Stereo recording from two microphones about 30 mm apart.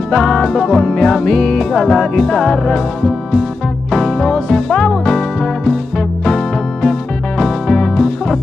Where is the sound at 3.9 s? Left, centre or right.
Centre.